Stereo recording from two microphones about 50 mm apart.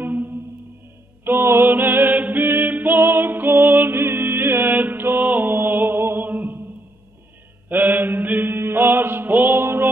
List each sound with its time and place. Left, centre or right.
0.0 s music: right
1.2 s music: right
7.7 s mantra: right